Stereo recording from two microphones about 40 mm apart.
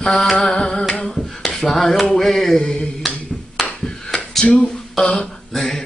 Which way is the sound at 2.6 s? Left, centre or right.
Left.